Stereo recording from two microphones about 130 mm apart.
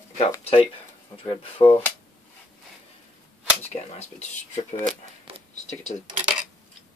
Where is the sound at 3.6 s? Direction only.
55° left (ahead or behind).